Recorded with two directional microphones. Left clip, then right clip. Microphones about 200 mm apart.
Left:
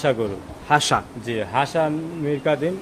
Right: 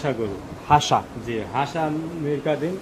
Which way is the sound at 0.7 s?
20° left (ahead or behind).